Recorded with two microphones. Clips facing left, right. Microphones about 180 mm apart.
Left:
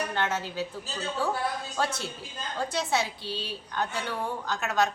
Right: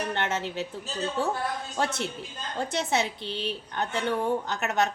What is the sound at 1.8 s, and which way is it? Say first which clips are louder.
A woman's voice: right 2 dB; 25° right (ahead or behind).